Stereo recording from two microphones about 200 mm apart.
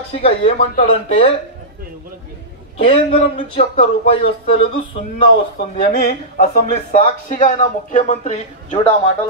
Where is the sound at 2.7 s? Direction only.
30° left (ahead or behind).